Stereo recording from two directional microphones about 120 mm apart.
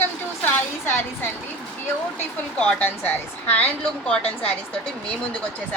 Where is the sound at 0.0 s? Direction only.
20° left (ahead or behind).